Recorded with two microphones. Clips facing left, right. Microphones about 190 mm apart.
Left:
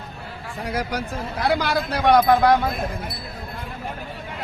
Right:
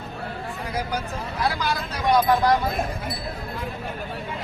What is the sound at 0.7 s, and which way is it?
Speech, 75° left (ahead or behind).